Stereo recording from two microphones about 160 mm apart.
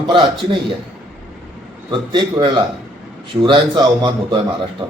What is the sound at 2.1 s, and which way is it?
A man's voice, 30° right (ahead or behind).